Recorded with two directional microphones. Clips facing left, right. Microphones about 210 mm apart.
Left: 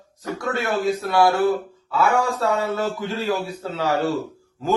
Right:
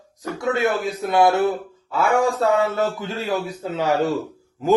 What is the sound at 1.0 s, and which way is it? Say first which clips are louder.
A man's voice: right 3 dB; 20° right (ahead or behind).